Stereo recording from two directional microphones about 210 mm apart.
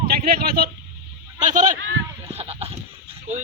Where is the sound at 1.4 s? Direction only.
35° right (ahead or behind).